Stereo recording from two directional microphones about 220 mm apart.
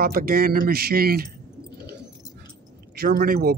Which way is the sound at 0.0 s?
40° right (ahead or behind).